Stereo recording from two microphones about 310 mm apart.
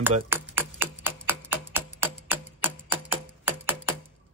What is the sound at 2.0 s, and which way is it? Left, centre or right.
Music, centre.